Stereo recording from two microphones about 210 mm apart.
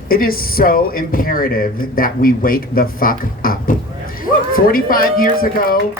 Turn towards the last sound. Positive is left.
turn(degrees=45)  # may be behind; listen again after turning